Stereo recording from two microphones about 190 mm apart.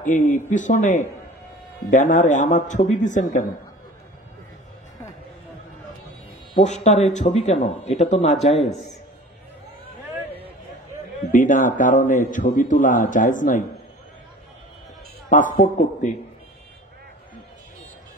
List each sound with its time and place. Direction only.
0.0 s a man's voice: 45° left (ahead or behind)
6.5 s a man's voice: 35° left (ahead or behind)
8.5 s speech: centre (ahead or behind)
11.3 s a man's voice: 45° left (ahead or behind)
15.2 s a man's voice: 45° left (ahead or behind)